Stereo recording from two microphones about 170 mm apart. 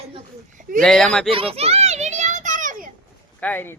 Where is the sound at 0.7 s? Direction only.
5° left (ahead or behind).